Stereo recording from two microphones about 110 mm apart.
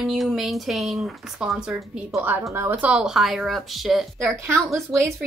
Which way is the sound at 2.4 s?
25° right (ahead or behind).